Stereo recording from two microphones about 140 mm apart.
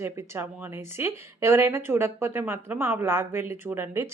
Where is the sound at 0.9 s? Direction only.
20° right (ahead or behind).